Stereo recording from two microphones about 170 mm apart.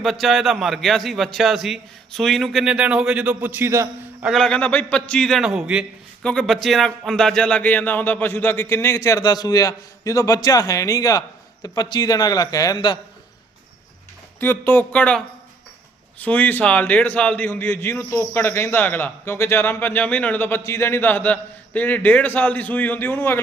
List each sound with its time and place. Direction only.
0.0 s a man's voice: centre (ahead or behind); by 4.3 s 15° right (ahead or behind)
4.3 s a man's voice: 5° left (ahead or behind); by 13.0 s 25° left (ahead or behind)
14.3 s a man's voice: 10° left (ahead or behind)